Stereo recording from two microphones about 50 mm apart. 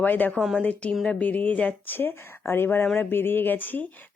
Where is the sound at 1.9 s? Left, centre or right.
Left.